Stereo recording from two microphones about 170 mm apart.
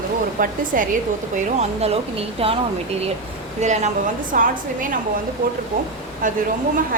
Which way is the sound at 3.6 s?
45° right (ahead or behind).